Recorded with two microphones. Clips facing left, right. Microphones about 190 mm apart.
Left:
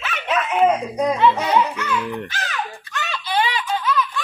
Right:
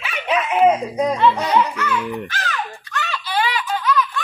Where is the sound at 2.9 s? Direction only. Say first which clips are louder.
Even; 15° left (ahead or behind).